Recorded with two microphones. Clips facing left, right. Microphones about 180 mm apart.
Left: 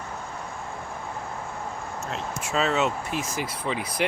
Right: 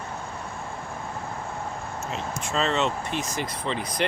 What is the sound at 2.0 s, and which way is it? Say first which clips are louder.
Speech: even; 5° left (ahead or behind).